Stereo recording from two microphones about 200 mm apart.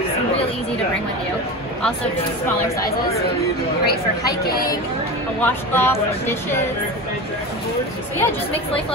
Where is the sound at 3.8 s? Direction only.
50° left (ahead or behind).